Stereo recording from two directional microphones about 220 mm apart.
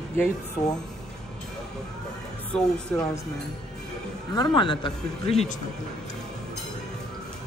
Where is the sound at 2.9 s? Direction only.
5° left (ahead or behind).